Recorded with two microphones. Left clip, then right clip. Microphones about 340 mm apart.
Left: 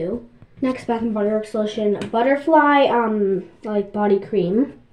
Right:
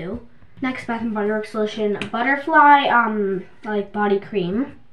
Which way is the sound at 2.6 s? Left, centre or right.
Right.